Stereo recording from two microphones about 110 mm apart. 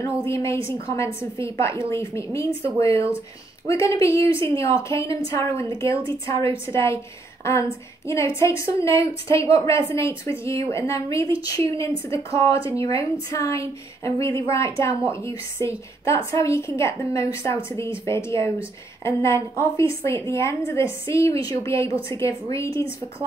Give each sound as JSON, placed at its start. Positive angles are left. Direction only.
{"t": 0.3, "sound": "a woman's voice", "side_deg": 25}
{"t": 6.7, "sound": "a woman's voice", "side_deg": 25}
{"t": 8.1, "sound": "a woman's voice", "side_deg": 25}